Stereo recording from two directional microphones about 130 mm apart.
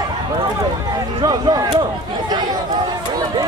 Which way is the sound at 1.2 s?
30° right (ahead or behind).